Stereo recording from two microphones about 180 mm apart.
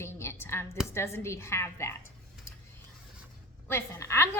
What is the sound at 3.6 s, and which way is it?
Speech, 15° left (ahead or behind).